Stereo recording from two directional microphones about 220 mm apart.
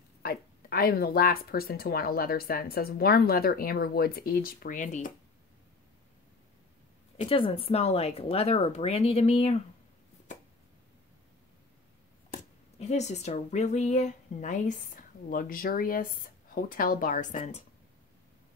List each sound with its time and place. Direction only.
0.2 s speech: 45° left (ahead or behind)
7.2 s speech: 25° left (ahead or behind)
12.7 s speech: 30° left (ahead or behind)